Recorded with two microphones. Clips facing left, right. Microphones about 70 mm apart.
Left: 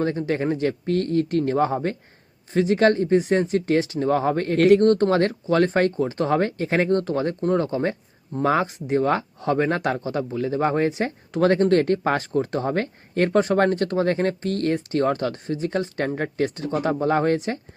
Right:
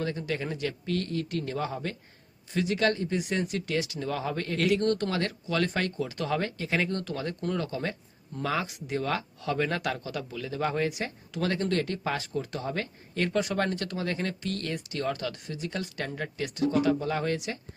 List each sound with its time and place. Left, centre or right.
0.0 s speech: left